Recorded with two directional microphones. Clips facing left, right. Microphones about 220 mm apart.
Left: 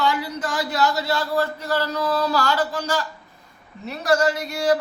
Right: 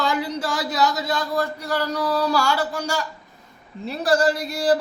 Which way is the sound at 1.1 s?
15° right (ahead or behind).